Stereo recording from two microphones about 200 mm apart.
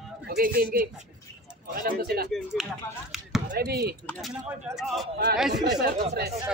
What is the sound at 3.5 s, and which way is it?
Speech, 55° right (ahead or behind).